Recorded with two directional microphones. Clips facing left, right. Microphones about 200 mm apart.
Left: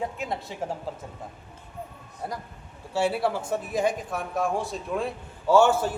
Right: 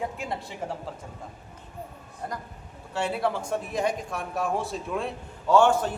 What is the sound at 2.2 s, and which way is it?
A man's voice, 5° left (ahead or behind).